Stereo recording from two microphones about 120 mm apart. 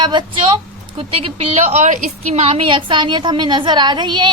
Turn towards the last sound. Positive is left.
turn(degrees=-40)  # may be behind; listen again after turning